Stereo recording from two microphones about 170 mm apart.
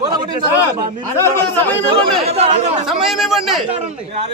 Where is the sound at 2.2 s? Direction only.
40° right (ahead or behind).